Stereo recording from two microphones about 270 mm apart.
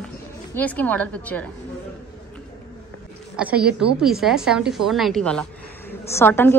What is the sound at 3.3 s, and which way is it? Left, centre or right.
A woman's voice, centre.